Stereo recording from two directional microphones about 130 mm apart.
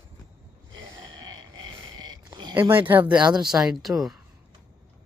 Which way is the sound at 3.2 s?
35° right (ahead or behind).